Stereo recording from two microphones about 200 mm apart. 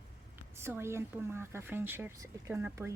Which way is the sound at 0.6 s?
10° right (ahead or behind).